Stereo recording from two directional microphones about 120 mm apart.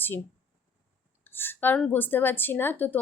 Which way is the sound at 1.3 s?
15° left (ahead or behind).